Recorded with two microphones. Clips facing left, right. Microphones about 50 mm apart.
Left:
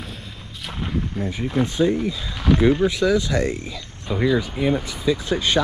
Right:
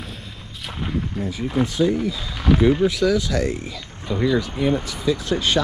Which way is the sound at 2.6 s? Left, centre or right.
Left.